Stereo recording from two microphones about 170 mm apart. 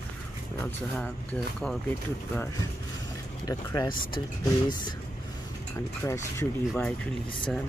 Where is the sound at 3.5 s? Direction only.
20° left (ahead or behind).